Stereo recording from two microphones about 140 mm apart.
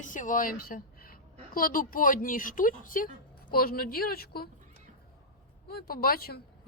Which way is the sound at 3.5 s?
90° left.